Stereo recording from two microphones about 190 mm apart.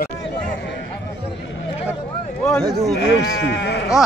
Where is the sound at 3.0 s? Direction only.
75° left (ahead or behind).